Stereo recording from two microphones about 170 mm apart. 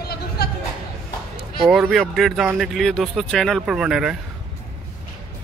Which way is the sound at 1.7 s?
Centre (ahead or behind).